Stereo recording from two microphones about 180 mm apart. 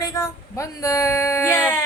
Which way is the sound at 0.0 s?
15° left (ahead or behind).